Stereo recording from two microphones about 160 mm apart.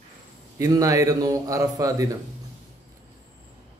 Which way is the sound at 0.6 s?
20° right (ahead or behind).